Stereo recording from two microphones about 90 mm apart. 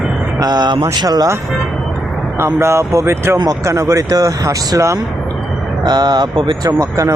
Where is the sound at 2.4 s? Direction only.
25° right (ahead or behind).